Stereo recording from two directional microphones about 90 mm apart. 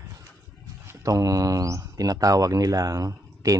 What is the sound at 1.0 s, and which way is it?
Speech, 40° right (ahead or behind).